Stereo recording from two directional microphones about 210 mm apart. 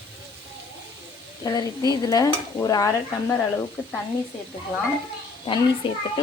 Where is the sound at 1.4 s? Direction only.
20° left (ahead or behind).